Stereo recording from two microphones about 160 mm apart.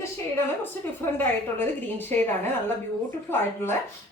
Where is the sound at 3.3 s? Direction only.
15° left (ahead or behind).